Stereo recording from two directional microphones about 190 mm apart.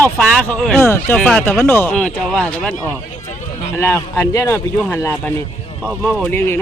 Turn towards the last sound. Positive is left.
turn(degrees=10)  # may be behind; listen again after turning